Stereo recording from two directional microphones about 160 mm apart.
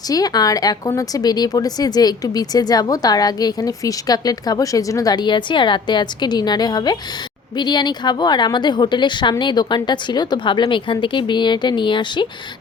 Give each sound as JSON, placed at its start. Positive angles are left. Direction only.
{"t": 0.1, "sound": "speech", "side_deg": 25}